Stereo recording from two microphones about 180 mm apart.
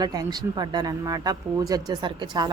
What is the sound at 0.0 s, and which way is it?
A woman's voice, 20° right (ahead or behind).